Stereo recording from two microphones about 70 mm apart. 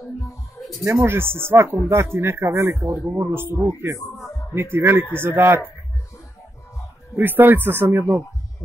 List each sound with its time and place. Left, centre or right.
0.8 s speech: right
3.6 s speech: right
7.2 s speech: right